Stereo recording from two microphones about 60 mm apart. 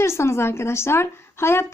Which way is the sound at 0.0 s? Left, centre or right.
Left.